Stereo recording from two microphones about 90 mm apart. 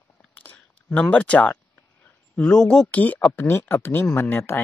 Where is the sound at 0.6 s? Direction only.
10° left (ahead or behind).